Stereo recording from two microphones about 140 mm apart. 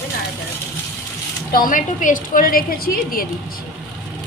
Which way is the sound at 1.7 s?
70° left (ahead or behind).